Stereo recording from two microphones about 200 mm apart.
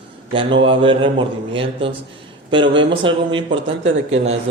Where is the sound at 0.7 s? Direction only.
25° right (ahead or behind).